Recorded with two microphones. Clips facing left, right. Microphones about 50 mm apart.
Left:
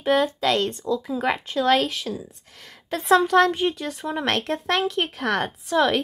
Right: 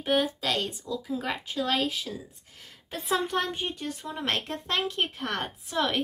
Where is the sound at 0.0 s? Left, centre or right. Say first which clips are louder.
Left 6 dB; left.